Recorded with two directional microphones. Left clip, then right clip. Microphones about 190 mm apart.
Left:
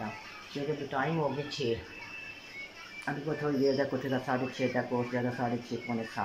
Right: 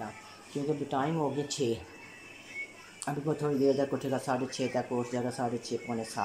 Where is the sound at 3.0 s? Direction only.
10° right (ahead or behind).